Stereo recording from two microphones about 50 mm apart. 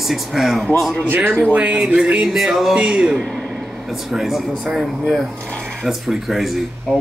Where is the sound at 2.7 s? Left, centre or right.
Centre.